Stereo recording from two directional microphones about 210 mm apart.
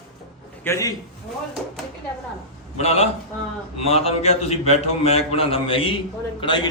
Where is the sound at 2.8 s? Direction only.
30° left (ahead or behind).